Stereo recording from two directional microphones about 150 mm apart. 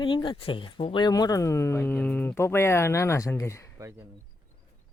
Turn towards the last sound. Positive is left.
turn(degrees=-15)  # may be behind; listen again after turning